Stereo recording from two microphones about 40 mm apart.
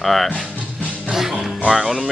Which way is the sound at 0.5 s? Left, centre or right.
Right.